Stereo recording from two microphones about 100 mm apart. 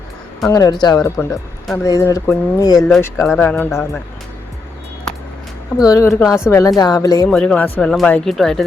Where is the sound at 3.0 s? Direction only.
25° left (ahead or behind).